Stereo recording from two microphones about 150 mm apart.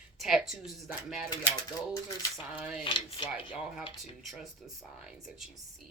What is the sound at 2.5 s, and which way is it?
Speech, 10° right (ahead or behind).